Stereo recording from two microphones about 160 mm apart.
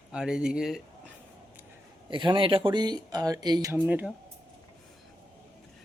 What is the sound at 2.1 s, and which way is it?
Speech, 30° right (ahead or behind).